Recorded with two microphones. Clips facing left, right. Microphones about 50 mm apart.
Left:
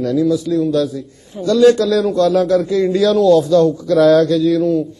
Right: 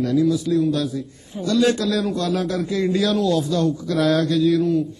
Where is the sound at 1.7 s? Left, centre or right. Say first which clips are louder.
Left 8 dB; right.